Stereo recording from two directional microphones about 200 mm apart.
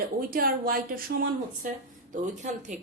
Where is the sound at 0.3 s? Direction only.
45° right (ahead or behind).